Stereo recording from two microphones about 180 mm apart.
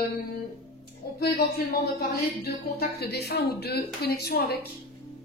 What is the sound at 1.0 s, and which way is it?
Speech, 60° left (ahead or behind).